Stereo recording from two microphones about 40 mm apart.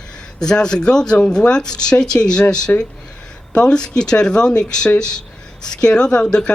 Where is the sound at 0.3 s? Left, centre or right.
Centre.